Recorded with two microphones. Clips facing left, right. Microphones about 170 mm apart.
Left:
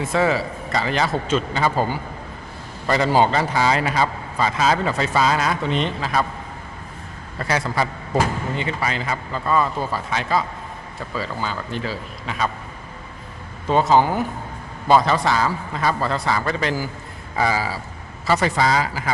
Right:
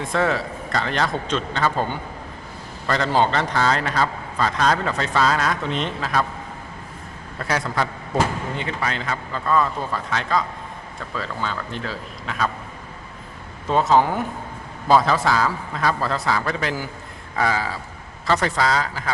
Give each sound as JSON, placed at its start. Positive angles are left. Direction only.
{"t": 0.0, "sound": "a man's voice", "side_deg": 0}
{"t": 7.3, "sound": "speech", "side_deg": 0}
{"t": 13.7, "sound": "a man's voice", "side_deg": 0}